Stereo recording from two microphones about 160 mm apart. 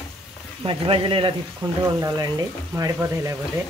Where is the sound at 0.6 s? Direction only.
35° right (ahead or behind).